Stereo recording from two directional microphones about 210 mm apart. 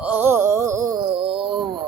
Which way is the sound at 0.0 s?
10° right (ahead or behind).